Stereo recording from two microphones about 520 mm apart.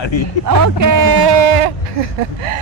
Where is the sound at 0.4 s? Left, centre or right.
Right.